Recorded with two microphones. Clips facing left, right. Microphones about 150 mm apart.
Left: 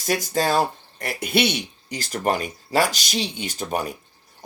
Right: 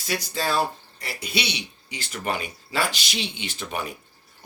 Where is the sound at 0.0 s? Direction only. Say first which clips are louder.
Left 5 dB; 45° left (ahead or behind).